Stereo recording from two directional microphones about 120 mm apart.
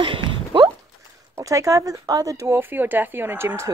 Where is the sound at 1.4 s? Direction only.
25° right (ahead or behind).